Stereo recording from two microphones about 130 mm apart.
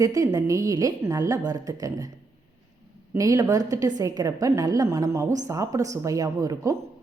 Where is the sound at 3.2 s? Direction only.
25° right (ahead or behind).